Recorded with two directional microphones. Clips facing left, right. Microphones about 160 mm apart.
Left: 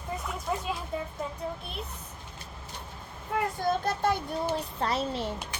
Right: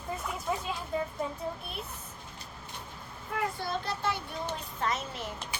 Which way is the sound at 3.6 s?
45° left (ahead or behind).